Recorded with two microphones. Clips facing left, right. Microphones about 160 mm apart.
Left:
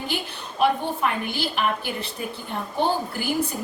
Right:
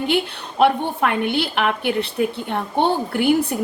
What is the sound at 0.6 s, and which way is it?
A woman's voice, 65° right (ahead or behind).